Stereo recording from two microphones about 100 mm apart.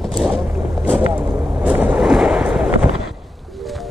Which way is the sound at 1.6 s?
15° right (ahead or behind).